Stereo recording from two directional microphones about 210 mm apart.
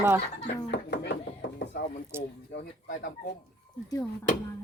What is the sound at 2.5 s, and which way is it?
Speech, 50° left (ahead or behind).